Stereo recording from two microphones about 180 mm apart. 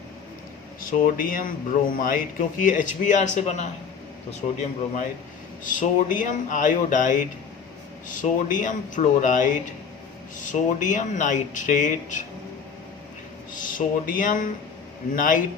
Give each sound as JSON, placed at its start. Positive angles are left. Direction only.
{"t": 0.9, "sound": "speech", "side_deg": 50}
{"t": 5.6, "sound": "speech", "side_deg": 45}
{"t": 13.5, "sound": "speech", "side_deg": 50}